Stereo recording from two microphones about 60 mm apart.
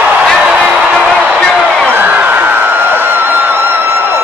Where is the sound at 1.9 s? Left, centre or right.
Right.